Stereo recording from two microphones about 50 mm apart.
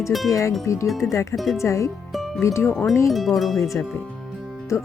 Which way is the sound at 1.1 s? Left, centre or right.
Left.